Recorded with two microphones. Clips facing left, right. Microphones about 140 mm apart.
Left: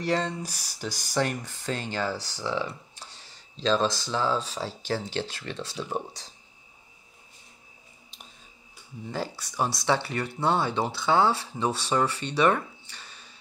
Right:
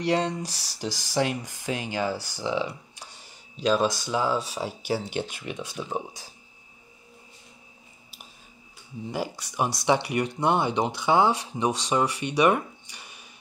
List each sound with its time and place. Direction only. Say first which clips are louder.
0.0 s speech: right 2 dB; 15° right (ahead or behind)
0.5 s speech: right 1 dB; 15° left (ahead or behind)
1.1 s speech: right 1 dB; 15° right (ahead or behind)
9.0 s speech: right 2 dB; 15° right (ahead or behind)